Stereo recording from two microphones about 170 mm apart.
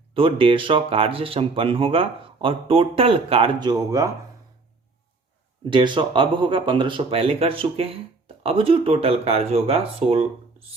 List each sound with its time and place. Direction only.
0.1 s speech: 30° right (ahead or behind)
5.7 s speech: 30° right (ahead or behind)